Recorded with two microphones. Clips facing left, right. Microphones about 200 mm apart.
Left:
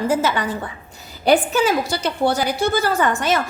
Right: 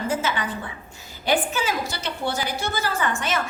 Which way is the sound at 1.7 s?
35° left (ahead or behind).